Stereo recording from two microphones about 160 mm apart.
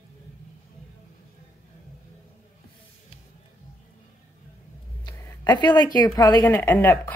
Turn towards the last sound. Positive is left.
turn(degrees=10)  # may be behind; listen again after turning